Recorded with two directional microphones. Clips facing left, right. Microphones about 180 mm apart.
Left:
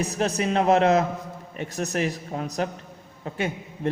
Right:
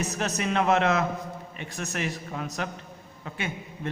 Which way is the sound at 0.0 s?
35° left (ahead or behind).